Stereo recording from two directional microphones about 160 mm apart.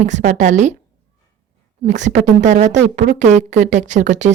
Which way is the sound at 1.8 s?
50° right (ahead or behind).